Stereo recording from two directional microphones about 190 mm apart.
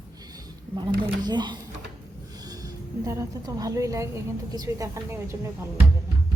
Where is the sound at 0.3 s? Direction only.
25° right (ahead or behind).